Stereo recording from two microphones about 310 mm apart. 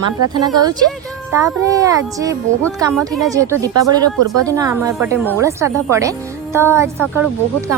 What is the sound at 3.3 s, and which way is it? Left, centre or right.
Speech, centre.